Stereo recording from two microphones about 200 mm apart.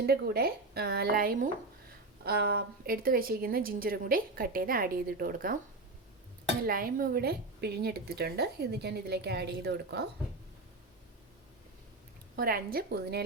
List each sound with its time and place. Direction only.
0.0 s a woman's voice: 50° right (ahead or behind)
6.7 s a woman's voice: 45° right (ahead or behind)
12.4 s a woman's voice: 50° right (ahead or behind)